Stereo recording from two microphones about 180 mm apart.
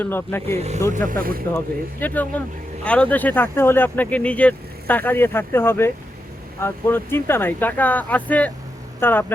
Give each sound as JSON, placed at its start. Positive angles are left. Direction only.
{"t": 0.0, "sound": "speech", "side_deg": 10}
{"t": 0.9, "sound": "speech", "side_deg": -50}
{"t": 1.5, "sound": "speech", "side_deg": 10}